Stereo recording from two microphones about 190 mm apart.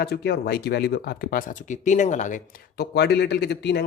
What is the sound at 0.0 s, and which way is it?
Speech, 55° left (ahead or behind).